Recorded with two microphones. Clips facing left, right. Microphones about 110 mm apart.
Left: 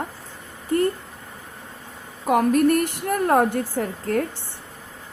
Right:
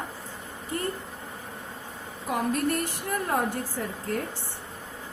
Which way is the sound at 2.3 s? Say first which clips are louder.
Left 9 dB; 60° left (ahead or behind).